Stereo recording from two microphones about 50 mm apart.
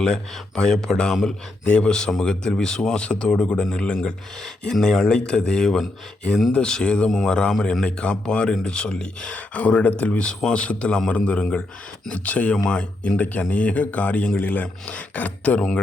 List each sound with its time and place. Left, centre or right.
0.0 s a man's voice: centre
7.1 s a man's voice: centre
7.6 s a man's voice: centre
9.5 s speech: left